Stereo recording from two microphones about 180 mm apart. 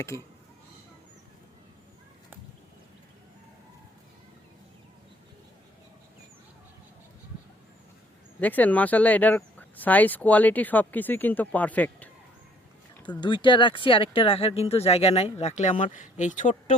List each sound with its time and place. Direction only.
8.4 s speech: 10° left (ahead or behind)
13.1 s speech: 25° left (ahead or behind); by 16.7 s 45° left (ahead or behind)